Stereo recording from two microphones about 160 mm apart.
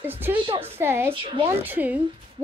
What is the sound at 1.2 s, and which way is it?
Speech, 30° right (ahead or behind).